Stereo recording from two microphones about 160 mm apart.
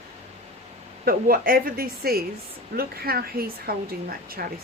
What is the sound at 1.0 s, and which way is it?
Speech, 65° right (ahead or behind).